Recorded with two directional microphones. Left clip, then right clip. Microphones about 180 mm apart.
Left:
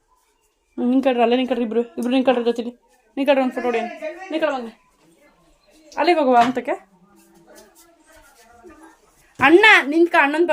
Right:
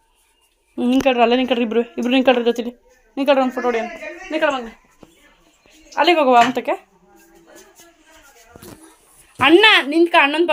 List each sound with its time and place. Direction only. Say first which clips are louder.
0.8 s a woman's voice: right 2 dB; 10° left (ahead or behind)
3.2 s a man's voice: right 2 dB; 20° left (ahead or behind)
4.3 s a woman's voice: right 3 dB; 5° left (ahead or behind)
5.9 s speech: right 3 dB; 15° left (ahead or behind)
9.4 s a woman's voice: even; centre (ahead or behind)